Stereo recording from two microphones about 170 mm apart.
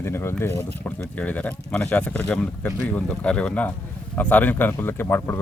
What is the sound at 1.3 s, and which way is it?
Speech, 10° left (ahead or behind).